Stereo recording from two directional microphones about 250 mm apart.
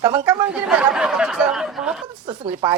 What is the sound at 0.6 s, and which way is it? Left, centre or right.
Speech, centre.